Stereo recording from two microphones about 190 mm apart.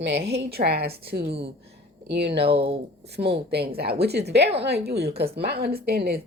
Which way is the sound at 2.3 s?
30° right (ahead or behind).